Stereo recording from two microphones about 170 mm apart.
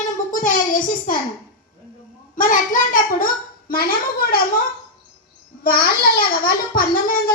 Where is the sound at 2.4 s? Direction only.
50° left (ahead or behind).